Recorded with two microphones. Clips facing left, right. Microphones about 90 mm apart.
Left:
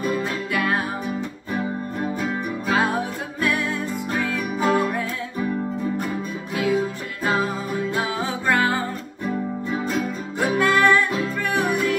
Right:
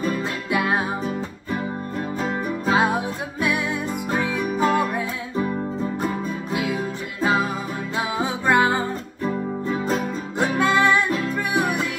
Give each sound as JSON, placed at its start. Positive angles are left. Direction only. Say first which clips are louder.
{"t": 0.2, "sound": "music", "louder": "right 1 dB", "side_deg": -20}
{"t": 2.7, "sound": "music", "louder": "right 1 dB", "side_deg": -20}
{"t": 8.2, "sound": "music", "louder": "right 4 dB", "side_deg": -20}
{"t": 10.6, "sound": "music", "louder": "left 1 dB", "side_deg": -20}